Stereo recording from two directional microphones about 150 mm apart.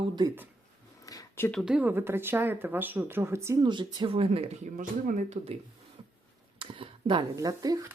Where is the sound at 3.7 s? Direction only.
30° right (ahead or behind).